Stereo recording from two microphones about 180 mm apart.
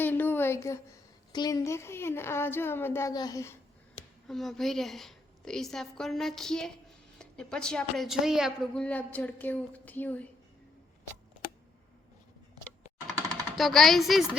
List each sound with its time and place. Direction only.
0.0 s a woman's voice: 10° left (ahead or behind)
4.3 s a woman's voice: centre (ahead or behind)
12.6 s typing: 20° right (ahead or behind)
13.6 s a woman's voice: centre (ahead or behind)